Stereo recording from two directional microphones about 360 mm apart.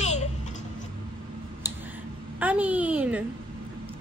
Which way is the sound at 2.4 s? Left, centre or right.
Centre.